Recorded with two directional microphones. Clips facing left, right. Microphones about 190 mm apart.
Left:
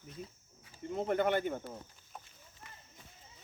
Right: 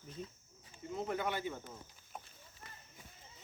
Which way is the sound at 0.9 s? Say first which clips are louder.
Left 7 dB; 60° left (ahead or behind).